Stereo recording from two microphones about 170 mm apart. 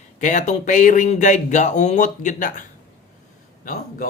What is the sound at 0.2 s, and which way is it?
Speech, 45° left (ahead or behind).